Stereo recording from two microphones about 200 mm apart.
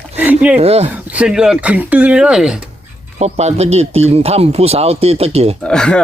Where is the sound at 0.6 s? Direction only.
30° right (ahead or behind).